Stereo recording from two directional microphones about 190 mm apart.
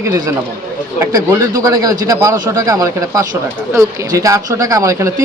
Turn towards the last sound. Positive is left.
turn(degrees=-15)  # may be behind; listen again after turning